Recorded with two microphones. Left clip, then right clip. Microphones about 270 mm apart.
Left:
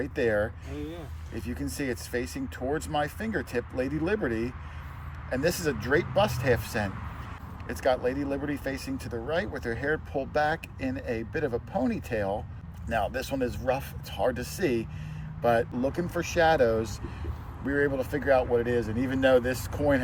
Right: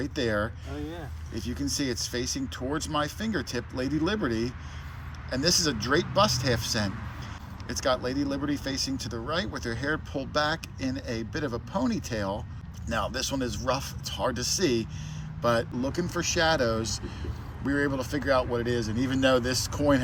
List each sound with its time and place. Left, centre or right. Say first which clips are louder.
0.0 s speech: left 2 dB; centre